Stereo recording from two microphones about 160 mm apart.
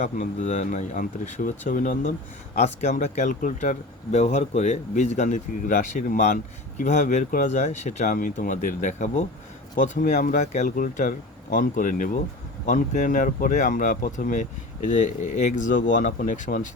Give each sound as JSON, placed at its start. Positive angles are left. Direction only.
{"t": 0.0, "sound": "speech", "side_deg": 45}